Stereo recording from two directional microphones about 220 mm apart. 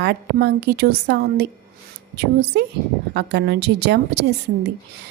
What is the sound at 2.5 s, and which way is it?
A woman's voice, 50° right (ahead or behind).